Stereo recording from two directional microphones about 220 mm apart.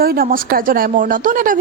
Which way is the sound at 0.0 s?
40° right (ahead or behind).